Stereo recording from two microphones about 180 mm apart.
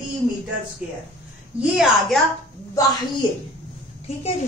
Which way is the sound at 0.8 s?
5° right (ahead or behind).